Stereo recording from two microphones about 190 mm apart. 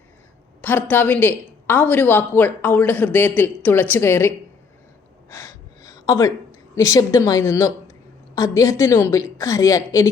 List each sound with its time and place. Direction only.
0.6 s a woman's voice: 10° left (ahead or behind)
5.3 s gasp: 15° left (ahead or behind)
6.7 s a woman's voice: 15° left (ahead or behind)